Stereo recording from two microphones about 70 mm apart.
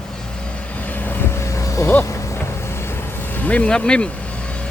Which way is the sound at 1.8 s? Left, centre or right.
Left.